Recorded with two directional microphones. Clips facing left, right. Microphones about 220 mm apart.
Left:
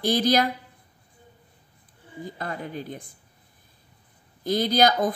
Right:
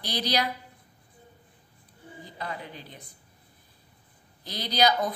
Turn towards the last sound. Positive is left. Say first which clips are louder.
# left 4 dB
turn(degrees=50)  # may be behind; listen again after turning